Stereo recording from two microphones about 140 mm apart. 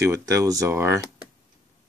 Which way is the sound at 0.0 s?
20° right (ahead or behind).